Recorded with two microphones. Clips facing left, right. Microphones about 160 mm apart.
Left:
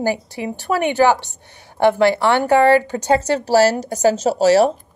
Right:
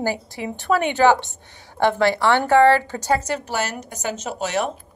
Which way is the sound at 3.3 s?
30° left (ahead or behind).